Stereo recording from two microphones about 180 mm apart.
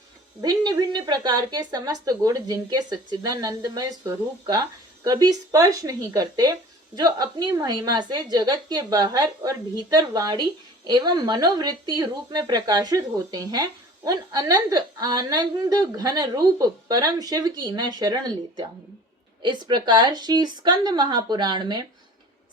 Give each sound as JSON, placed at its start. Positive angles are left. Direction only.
{"t": 0.4, "sound": "speech", "side_deg": -25}